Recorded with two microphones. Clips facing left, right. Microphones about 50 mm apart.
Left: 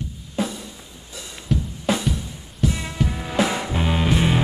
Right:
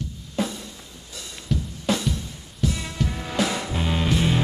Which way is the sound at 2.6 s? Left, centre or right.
Left.